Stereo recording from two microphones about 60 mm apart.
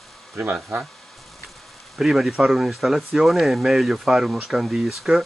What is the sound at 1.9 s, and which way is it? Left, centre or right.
Speech, centre.